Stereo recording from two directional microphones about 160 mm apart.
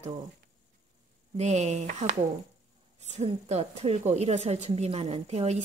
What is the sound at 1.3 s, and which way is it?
A woman's voice, 45° right (ahead or behind).